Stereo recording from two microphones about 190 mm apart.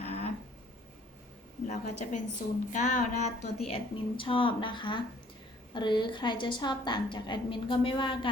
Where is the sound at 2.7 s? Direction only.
40° left (ahead or behind).